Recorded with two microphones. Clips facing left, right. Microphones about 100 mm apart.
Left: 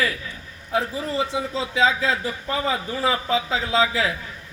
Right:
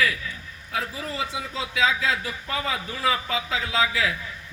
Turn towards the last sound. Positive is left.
turn(degrees=30)  # may be behind; listen again after turning